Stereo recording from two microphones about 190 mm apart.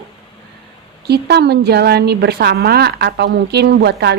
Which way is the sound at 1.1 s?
60° right (ahead or behind).